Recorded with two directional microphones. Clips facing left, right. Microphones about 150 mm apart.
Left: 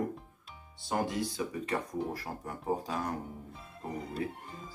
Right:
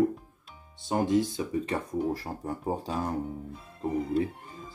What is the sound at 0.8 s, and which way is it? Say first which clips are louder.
Speech: right 7 dB; 25° right (ahead or behind).